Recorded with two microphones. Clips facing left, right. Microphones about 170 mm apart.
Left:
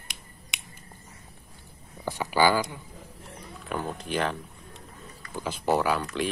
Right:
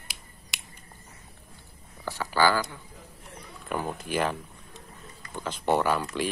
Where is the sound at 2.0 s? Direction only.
15° left (ahead or behind).